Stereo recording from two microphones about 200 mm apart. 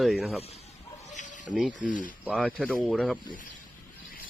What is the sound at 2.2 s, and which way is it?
Speech, 5° left (ahead or behind).